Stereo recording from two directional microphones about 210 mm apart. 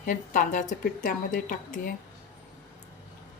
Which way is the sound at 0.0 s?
40° left (ahead or behind).